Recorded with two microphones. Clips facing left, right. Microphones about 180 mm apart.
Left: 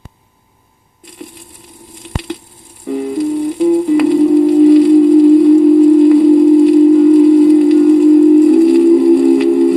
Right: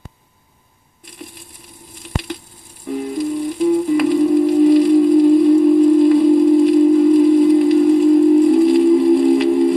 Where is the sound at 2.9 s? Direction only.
70° left (ahead or behind).